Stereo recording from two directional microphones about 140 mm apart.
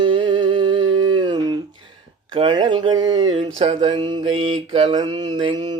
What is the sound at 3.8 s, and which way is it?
Mantra, 35° right (ahead or behind).